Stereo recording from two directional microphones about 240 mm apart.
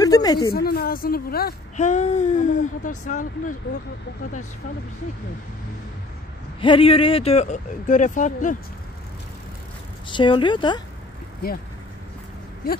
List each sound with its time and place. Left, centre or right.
0.0 s a sound: centre
0.5 s a woman's voice: left
6.6 s speech: left
10.0 s speech: centre